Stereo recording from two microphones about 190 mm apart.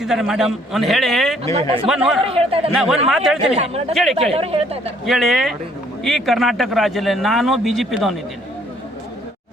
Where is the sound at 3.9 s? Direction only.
Centre (ahead or behind).